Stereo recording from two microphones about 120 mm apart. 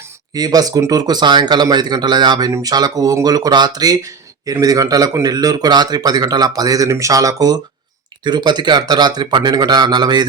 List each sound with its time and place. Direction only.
0.3 s speech: 35° right (ahead or behind)